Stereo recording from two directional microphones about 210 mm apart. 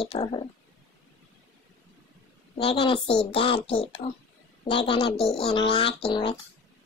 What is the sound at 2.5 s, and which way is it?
Child singing, 25° left (ahead or behind).